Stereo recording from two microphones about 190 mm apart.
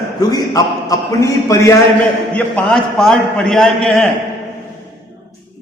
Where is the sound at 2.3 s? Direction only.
5° left (ahead or behind).